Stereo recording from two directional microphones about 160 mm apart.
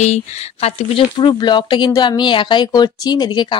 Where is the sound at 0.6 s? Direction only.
35° left (ahead or behind).